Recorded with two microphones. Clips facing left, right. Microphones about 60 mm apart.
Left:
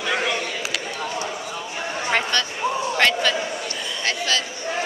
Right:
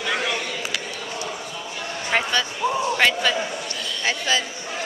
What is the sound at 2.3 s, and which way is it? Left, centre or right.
A man's voice, centre.